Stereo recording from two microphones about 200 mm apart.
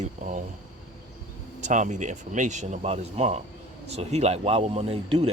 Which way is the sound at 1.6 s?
40° right (ahead or behind).